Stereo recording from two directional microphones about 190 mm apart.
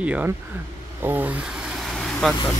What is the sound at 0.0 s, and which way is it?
Speech, 5° right (ahead or behind).